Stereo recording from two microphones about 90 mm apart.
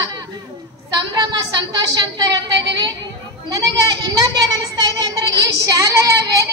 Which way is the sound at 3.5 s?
40° right (ahead or behind).